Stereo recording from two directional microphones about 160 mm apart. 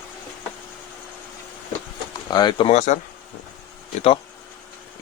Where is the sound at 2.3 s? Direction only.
30° left (ahead or behind); by 3.0 s 45° left (ahead or behind).